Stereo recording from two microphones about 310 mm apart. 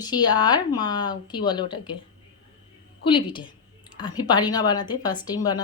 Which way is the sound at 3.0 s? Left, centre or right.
Centre.